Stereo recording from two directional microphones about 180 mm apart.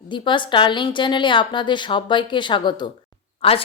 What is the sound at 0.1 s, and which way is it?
A woman's voice, 25° left (ahead or behind).